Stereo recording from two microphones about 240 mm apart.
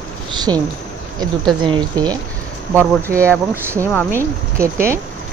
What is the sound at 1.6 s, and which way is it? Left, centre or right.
Speech, centre.